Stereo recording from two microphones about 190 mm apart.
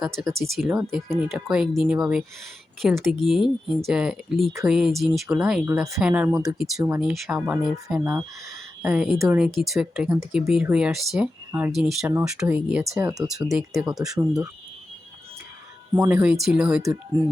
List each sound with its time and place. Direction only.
0.0 s speech: centre (ahead or behind)
5.6 s a woman's voice: 15° right (ahead or behind)
6.7 s a woman's voice: 15° right (ahead or behind)
7.0 s speech: 5° right (ahead or behind)
14.1 s speech: 20° right (ahead or behind)
16.0 s speech: 5° right (ahead or behind)